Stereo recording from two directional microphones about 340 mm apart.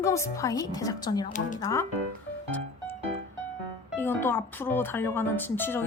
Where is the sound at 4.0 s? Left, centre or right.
Centre.